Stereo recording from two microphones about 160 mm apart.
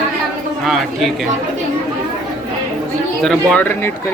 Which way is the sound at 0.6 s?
Centre (ahead or behind).